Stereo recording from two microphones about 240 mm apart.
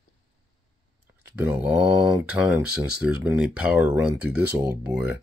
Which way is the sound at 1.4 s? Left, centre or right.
Centre.